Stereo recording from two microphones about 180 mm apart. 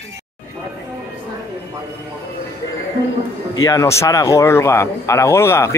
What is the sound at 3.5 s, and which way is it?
Speech, 20° left (ahead or behind).